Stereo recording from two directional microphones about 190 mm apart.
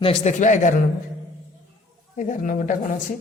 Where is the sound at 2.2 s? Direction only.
40° left (ahead or behind).